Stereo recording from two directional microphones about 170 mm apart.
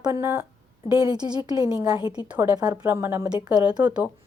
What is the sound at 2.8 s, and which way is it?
Speech, 15° right (ahead or behind).